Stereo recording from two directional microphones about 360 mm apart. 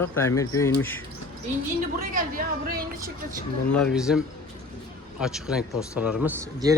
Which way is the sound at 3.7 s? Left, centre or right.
Centre.